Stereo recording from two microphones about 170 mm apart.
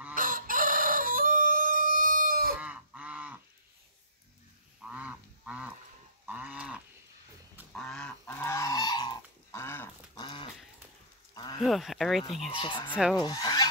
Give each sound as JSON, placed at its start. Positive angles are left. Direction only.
{"t": 0.1, "sound": "chicken", "side_deg": -55}
{"t": 2.6, "sound": "goose", "side_deg": -10}
{"t": 4.9, "sound": "goose", "side_deg": -5}
{"t": 6.2, "sound": "livestock", "side_deg": -10}
{"t": 7.7, "sound": "goose", "side_deg": 5}
{"t": 10.1, "sound": "dog", "side_deg": 25}
{"t": 11.3, "sound": "a sound", "side_deg": 25}
{"t": 11.6, "sound": "speech", "side_deg": 0}
{"t": 12.4, "sound": "speech", "side_deg": 30}